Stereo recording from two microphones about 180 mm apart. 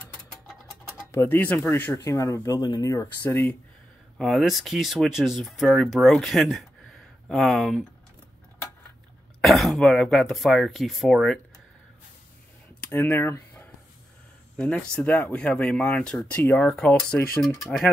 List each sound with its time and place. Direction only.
1.1 s speech: 15° left (ahead or behind)
4.2 s speech: centre (ahead or behind)
9.4 s speech: centre (ahead or behind)
12.8 s speech: 10° left (ahead or behind)